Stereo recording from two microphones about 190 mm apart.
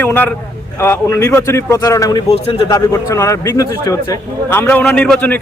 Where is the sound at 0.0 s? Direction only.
10° left (ahead or behind).